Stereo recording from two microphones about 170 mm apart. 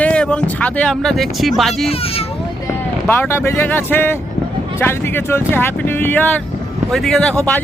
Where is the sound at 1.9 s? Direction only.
35° left (ahead or behind).